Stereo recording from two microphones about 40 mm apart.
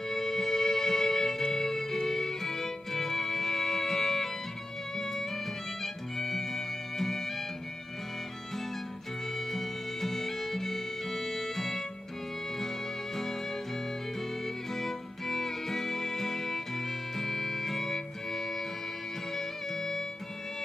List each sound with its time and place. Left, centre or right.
0.1 s music: centre
9.5 s music: centre
14.4 s music: centre